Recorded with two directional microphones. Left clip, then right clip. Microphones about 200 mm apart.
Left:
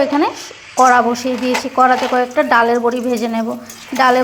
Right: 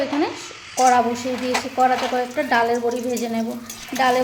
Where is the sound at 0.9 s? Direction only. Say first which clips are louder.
Left 3 dB; 20° left (ahead or behind).